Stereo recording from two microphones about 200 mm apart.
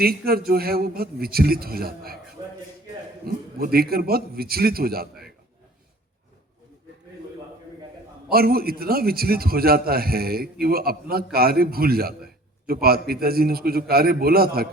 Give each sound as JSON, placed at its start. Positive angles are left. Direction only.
{"t": 0.0, "sound": "a man's voice", "side_deg": -50}
{"t": 2.4, "sound": "a sound", "side_deg": -20}
{"t": 3.2, "sound": "a man's voice", "side_deg": -50}
{"t": 8.3, "sound": "a man's voice", "side_deg": -50}